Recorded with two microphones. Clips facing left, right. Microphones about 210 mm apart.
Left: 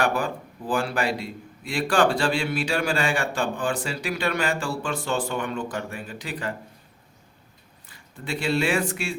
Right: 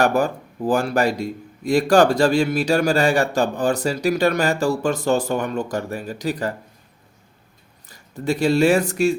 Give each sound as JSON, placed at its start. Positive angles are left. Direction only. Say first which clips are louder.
{"t": 0.0, "sound": "a man's voice", "louder": "right 6 dB", "side_deg": -45}
{"t": 7.9, "sound": "speech", "louder": "right 9 dB", "side_deg": -40}